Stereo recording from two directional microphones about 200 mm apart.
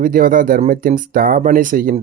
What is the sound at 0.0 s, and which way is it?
Speech, 40° right (ahead or behind).